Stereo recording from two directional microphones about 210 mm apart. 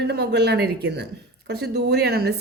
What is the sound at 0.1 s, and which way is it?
A woman's voice, 55° right (ahead or behind).